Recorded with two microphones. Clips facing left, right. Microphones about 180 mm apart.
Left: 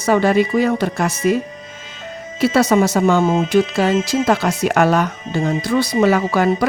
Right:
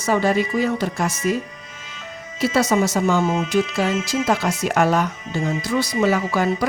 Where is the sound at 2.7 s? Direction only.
65° left (ahead or behind).